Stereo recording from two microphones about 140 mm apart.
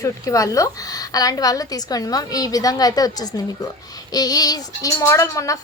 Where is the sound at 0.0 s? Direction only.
25° left (ahead or behind).